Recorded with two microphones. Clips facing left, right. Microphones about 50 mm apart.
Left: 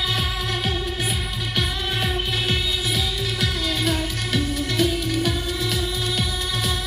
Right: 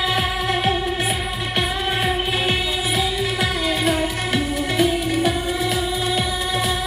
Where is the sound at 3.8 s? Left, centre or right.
Right.